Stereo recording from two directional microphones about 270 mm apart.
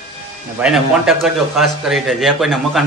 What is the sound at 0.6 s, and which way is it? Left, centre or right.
A man's voice, centre.